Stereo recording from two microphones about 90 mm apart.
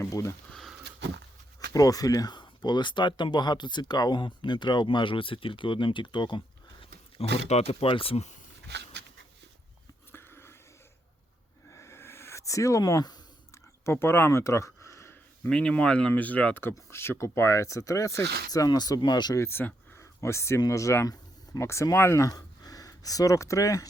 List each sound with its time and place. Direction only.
0.1 s speech: 35° left (ahead or behind)
0.5 s speech: centre (ahead or behind)
1.7 s speech: 40° left (ahead or behind); by 6.4 s 60° left (ahead or behind)
7.7 s speech: 85° left
10.1 s a sound: 25° left (ahead or behind)
11.7 s a sound: 30° left (ahead or behind); by 13.1 s 50° left (ahead or behind)
13.8 s speech: 25° left (ahead or behind)
15.4 s speech: 10° left (ahead or behind); by 19.4 s 50° left (ahead or behind)
19.4 s speech: 25° left (ahead or behind)
22.3 s speech: 45° left (ahead or behind)